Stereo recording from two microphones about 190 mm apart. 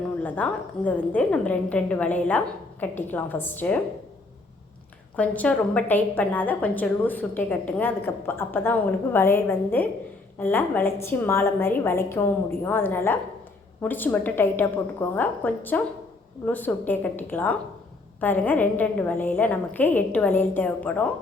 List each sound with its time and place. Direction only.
0.2 s a woman's voice: 5° left (ahead or behind)
5.1 s a woman's voice: 5° left (ahead or behind)